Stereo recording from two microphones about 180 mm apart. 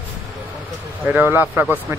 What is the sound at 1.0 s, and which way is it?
Speech, 10° right (ahead or behind).